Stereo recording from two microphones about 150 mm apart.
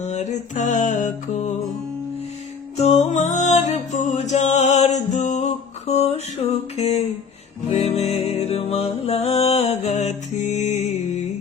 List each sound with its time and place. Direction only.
0.0 s music: 50° left (ahead or behind)
2.7 s music: 45° left (ahead or behind)
6.7 s a sound: 45° left (ahead or behind)
7.7 s music: 45° left (ahead or behind)